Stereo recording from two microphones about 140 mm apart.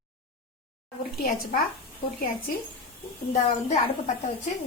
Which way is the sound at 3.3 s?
60° left (ahead or behind).